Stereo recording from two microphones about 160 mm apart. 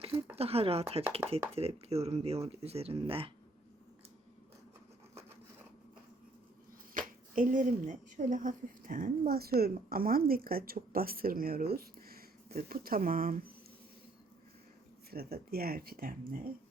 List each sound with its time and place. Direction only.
0.0 s a sound: 35° right (ahead or behind)
0.3 s speech: 40° right (ahead or behind)
7.3 s speech: 55° right (ahead or behind)
15.1 s speech: 75° right (ahead or behind)